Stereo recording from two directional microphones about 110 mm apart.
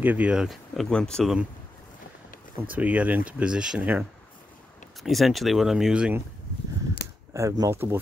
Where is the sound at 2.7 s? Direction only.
15° right (ahead or behind).